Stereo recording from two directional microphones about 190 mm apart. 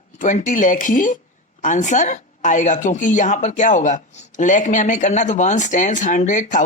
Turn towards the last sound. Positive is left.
turn(degrees=40)  # may be behind; listen again after turning